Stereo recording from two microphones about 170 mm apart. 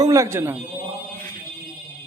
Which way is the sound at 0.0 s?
20° right (ahead or behind).